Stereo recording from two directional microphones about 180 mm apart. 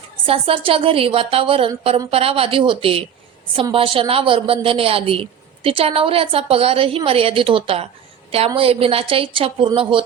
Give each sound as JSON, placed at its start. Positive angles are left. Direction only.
{"t": 0.3, "sound": "a woman's voice", "side_deg": -30}